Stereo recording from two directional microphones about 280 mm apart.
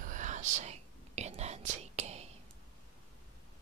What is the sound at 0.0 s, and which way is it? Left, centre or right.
Whispering, right.